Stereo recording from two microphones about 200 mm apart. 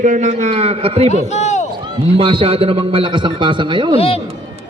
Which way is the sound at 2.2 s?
25° right (ahead or behind).